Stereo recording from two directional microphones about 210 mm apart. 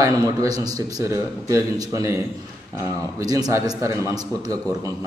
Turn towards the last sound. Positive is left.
turn(degrees=-15)  # may be behind; listen again after turning